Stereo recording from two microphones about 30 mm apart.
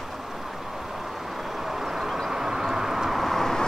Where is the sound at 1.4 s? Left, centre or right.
Centre.